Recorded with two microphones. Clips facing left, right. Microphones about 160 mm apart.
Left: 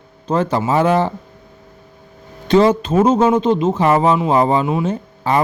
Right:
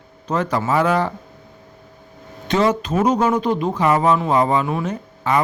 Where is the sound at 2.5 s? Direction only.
30° left (ahead or behind).